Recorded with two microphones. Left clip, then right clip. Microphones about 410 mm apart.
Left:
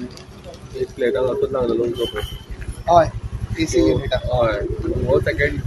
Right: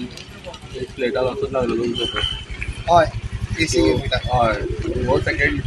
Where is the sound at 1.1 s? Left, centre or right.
Left.